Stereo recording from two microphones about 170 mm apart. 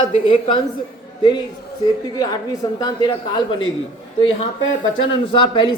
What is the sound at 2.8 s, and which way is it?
Speech, 25° left (ahead or behind).